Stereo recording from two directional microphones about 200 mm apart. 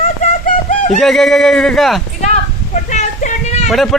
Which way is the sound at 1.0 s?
Centre (ahead or behind).